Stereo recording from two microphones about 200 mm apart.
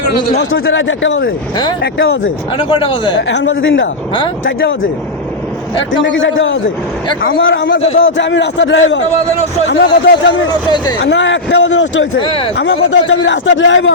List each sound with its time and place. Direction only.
0.6 s a man's voice: 70° left (ahead or behind)
2.6 s a man's voice: 25° left (ahead or behind)
3.2 s a man's voice: 65° left (ahead or behind)
5.9 s a man's voice: 70° left (ahead or behind)
12.2 s a man's voice: 25° left (ahead or behind)
12.5 s a man's voice: 60° left (ahead or behind)